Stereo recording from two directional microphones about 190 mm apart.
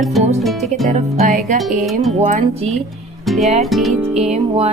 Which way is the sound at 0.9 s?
45° right (ahead or behind).